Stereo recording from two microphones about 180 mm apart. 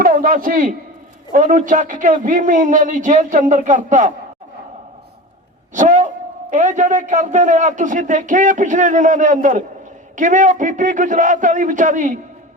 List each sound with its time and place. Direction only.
0.0 s a man's voice: 50° right (ahead or behind)
5.7 s a man's voice: 45° right (ahead or behind)